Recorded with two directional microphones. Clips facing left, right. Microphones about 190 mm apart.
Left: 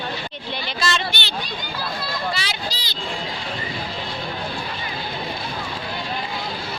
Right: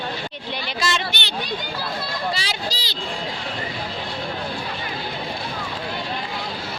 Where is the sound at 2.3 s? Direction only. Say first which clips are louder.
Right 1 dB; 35° right (ahead or behind).